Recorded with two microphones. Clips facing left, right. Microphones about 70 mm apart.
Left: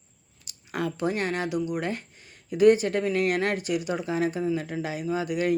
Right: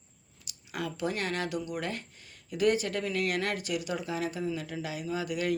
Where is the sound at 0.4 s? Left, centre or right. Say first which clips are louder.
Left 6 dB; left.